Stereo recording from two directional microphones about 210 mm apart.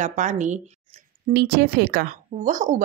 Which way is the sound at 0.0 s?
35° right (ahead or behind).